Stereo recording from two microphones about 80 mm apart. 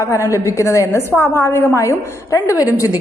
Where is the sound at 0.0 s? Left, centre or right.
Left.